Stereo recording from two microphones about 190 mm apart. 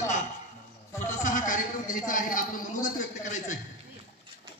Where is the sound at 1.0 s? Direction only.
40° left (ahead or behind).